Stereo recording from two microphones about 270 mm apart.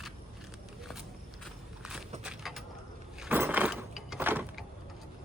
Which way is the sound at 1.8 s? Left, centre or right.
Centre.